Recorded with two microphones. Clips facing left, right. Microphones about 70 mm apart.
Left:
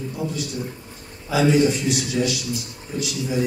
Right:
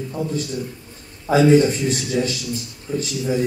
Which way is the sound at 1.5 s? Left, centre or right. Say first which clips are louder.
Right 3 dB; right.